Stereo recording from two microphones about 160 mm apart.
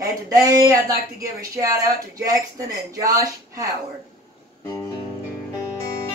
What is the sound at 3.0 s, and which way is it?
Music, 20° right (ahead or behind).